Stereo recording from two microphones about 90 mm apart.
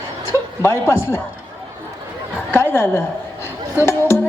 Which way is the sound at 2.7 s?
30° left (ahead or behind).